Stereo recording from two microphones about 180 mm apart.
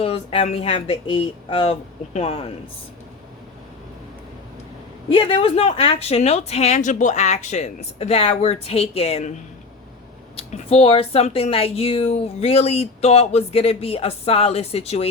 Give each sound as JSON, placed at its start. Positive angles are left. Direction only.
{"t": 0.0, "sound": "speech", "side_deg": 35}
{"t": 5.1, "sound": "speech", "side_deg": 30}